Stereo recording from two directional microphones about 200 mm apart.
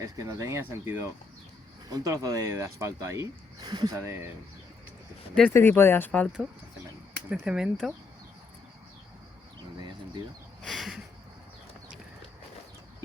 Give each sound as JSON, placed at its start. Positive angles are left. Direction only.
{"t": 0.0, "sound": "speech", "side_deg": -15}
{"t": 5.3, "sound": "speech", "side_deg": 10}
{"t": 7.3, "sound": "speech", "side_deg": -5}
{"t": 10.6, "sound": "a sound", "side_deg": 0}